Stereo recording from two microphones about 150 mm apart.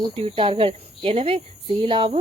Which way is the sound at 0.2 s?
35° right (ahead or behind).